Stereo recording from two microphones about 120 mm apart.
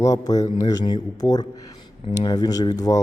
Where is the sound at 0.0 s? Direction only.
30° left (ahead or behind).